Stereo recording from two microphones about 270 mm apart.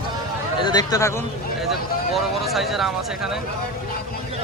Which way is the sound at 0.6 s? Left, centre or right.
Centre.